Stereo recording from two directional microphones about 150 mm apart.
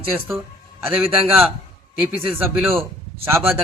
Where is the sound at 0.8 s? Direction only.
Centre (ahead or behind).